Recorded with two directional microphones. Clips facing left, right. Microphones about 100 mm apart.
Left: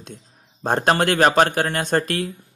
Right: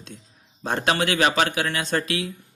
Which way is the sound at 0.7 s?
45° left (ahead or behind).